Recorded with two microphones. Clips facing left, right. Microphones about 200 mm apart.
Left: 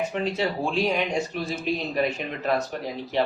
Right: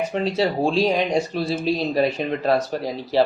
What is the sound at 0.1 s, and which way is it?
Speech, 35° right (ahead or behind).